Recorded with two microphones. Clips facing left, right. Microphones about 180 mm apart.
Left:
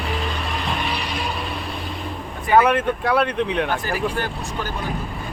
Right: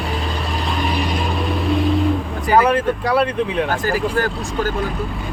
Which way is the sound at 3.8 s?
45° right (ahead or behind).